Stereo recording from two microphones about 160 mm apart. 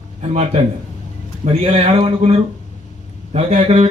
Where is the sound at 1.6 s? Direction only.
40° right (ahead or behind).